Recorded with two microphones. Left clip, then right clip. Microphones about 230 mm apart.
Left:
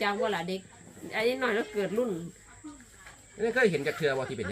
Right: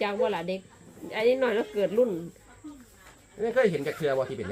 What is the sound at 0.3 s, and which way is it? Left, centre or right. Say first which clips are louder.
Speech: right 2 dB; left.